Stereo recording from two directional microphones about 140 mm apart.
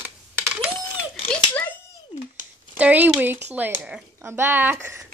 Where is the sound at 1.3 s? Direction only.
10° left (ahead or behind).